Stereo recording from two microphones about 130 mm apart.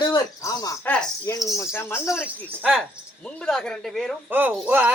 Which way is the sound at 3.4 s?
5° left (ahead or behind).